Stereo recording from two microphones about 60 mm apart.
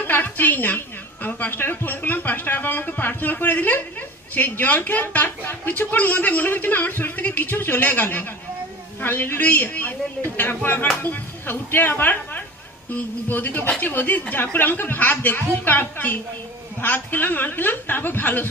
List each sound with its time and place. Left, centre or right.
0.0 s a woman's voice: left